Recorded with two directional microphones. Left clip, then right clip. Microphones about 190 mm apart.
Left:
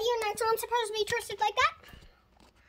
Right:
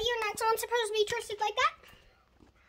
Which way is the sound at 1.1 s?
20° left (ahead or behind).